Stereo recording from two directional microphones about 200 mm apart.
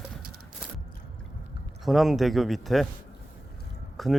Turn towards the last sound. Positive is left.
turn(degrees=0)  # may be behind; listen again after turning